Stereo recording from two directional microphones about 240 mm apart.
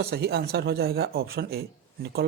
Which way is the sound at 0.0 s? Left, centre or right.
Right.